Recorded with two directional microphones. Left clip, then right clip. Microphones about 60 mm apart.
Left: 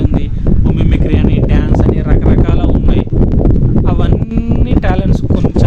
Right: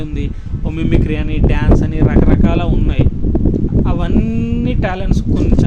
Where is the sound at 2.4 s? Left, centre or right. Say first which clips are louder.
Left 1 dB; left.